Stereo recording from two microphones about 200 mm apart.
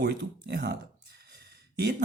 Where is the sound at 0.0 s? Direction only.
55° right (ahead or behind).